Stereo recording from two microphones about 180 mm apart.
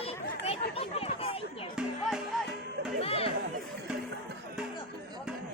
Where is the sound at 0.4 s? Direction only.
35° left (ahead or behind).